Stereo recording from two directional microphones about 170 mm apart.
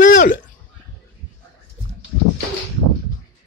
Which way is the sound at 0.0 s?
50° left (ahead or behind).